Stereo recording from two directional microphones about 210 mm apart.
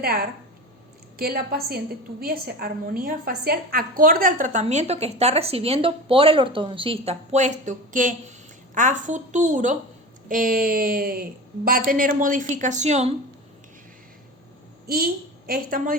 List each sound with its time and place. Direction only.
0.0 s a woman's voice: 45° right (ahead or behind)
14.8 s a woman's voice: 45° right (ahead or behind)